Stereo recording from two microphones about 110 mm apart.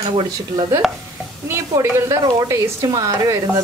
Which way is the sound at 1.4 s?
25° right (ahead or behind).